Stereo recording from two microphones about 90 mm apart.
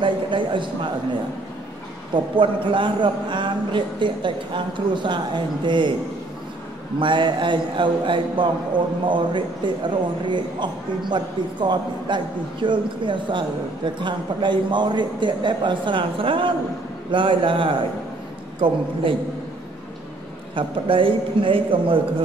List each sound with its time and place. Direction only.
0.0 s a man's voice: 65° right (ahead or behind)
2.1 s a man's voice: 70° right (ahead or behind)
7.0 s a man's voice: 65° right (ahead or behind)
20.5 s a man's voice: 75° right (ahead or behind)